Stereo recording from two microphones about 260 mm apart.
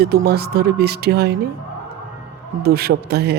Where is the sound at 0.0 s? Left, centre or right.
Right.